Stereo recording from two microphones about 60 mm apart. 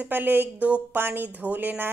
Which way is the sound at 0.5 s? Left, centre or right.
Right.